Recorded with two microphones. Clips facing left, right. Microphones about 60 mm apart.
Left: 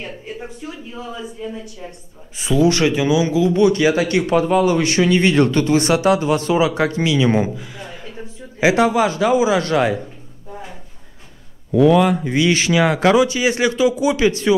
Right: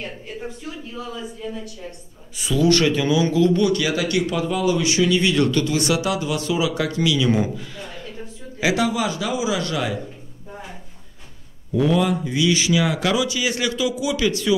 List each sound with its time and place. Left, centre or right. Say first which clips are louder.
0.0 s speech: left 1 dB; centre; by 7.5 s left
7.5 s speech: left 1 dB; centre; by 9.9 s left
11.7 s speech: left 6 dB; left